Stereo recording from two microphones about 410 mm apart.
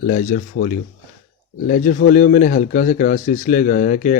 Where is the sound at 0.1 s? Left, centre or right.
Centre.